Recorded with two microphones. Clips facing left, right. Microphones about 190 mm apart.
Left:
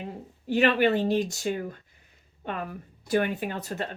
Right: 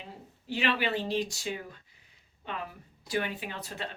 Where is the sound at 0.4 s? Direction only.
50° left (ahead or behind).